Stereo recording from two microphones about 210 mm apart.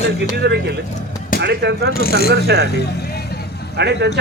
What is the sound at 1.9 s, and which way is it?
Speech, 45° left (ahead or behind).